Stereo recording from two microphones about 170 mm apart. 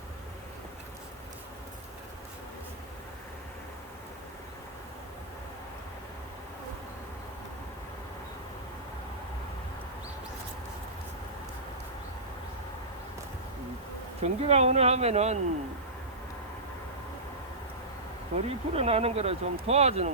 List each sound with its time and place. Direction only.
14.2 s speech: 40° right (ahead or behind)
18.3 s speech: 35° right (ahead or behind)